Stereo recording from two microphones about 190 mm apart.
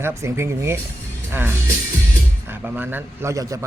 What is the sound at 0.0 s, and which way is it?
Speech, 15° right (ahead or behind).